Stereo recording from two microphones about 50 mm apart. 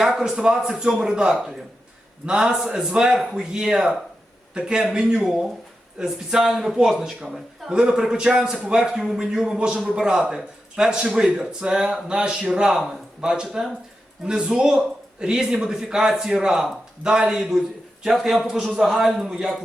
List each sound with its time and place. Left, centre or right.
0.0 s a man's voice: centre